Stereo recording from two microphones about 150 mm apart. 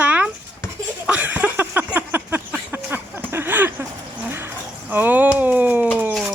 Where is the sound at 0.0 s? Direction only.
10° right (ahead or behind).